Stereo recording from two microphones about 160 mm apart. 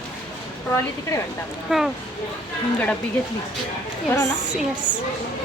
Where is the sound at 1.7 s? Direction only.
Centre (ahead or behind).